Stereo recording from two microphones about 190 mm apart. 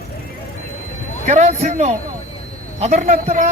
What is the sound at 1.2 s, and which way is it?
Speech, 35° right (ahead or behind).